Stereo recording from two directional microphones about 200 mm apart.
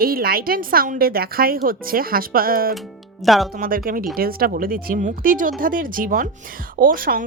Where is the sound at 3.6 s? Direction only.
45° right (ahead or behind).